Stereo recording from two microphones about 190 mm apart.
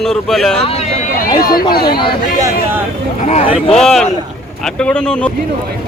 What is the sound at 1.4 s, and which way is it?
Speech, 50° left (ahead or behind).